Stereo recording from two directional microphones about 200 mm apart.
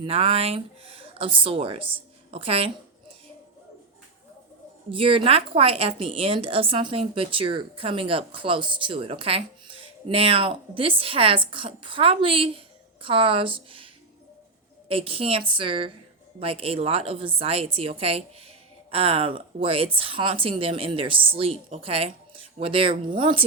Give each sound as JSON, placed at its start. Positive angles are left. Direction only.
{"t": 0.0, "sound": "a woman's voice", "side_deg": -30}
{"t": 4.9, "sound": "a woman's voice", "side_deg": -25}